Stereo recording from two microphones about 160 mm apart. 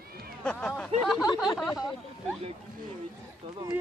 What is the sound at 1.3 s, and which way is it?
Speech, 25° left (ahead or behind).